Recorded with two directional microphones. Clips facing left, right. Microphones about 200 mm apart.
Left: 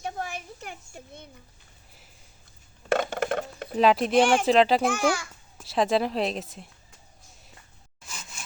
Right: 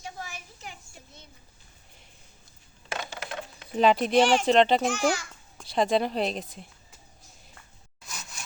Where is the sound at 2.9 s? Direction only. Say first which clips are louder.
Left 11 dB; 55° left (ahead or behind).